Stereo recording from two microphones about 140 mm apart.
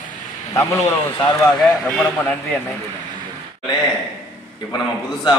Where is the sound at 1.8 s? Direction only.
5° left (ahead or behind).